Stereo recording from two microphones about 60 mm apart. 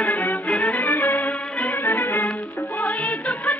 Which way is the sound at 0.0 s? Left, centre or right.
Left.